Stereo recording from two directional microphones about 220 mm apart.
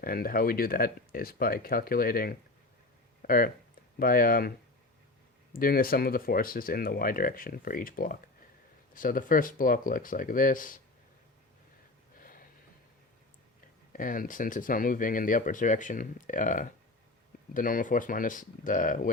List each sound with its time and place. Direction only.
0.0 s speech: 40° left (ahead or behind)
3.2 s a sound: 40° left (ahead or behind)
4.0 s speech: 40° left (ahead or behind)
5.5 s speech: 40° left (ahead or behind)
12.2 s a sound: 40° left (ahead or behind)
13.9 s speech: 40° left (ahead or behind)